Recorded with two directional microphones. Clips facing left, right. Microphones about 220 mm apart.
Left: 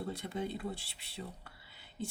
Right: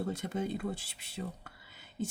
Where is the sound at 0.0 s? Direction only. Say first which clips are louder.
Right 3 dB; 45° right (ahead or behind).